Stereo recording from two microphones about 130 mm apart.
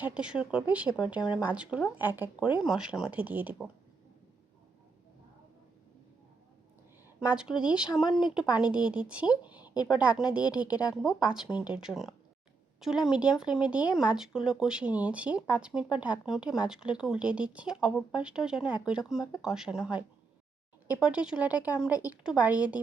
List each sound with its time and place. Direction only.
0.0 s speech: 10° right (ahead or behind)
7.3 s speech: 5° right (ahead or behind)
9.2 s speech: 30° left (ahead or behind)
9.6 s a sound: 35° left (ahead or behind)
10.0 s speech: 10° right (ahead or behind)